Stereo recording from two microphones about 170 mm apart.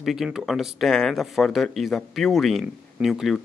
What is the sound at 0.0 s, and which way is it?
Speech, centre (ahead or behind).